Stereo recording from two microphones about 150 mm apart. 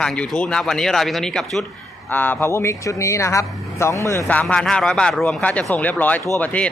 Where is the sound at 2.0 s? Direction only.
10° left (ahead or behind).